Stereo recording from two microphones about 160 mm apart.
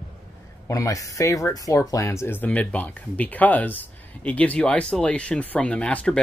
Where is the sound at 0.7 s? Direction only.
20° left (ahead or behind).